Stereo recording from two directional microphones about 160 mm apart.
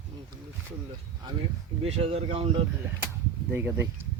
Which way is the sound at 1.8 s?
40° right (ahead or behind).